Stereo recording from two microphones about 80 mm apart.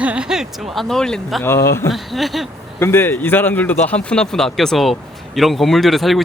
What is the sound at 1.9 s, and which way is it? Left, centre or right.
Speech, centre.